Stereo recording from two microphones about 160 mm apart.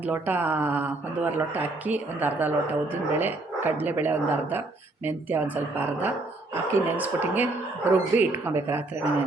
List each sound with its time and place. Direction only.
0.0 s speech: 10° right (ahead or behind)